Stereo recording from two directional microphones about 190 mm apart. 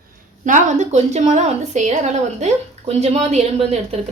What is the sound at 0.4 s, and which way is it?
Speech, 40° right (ahead or behind).